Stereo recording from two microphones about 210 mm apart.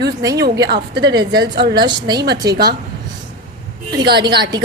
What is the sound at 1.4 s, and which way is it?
Speech, 50° right (ahead or behind).